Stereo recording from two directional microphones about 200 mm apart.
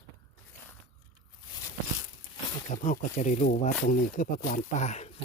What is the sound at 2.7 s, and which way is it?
Speech, 40° left (ahead or behind).